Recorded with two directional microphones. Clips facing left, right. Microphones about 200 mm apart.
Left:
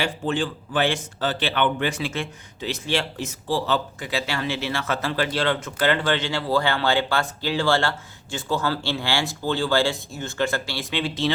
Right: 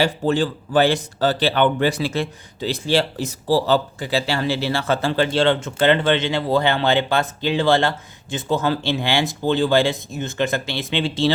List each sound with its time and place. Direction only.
0.0 s speech: 40° right (ahead or behind)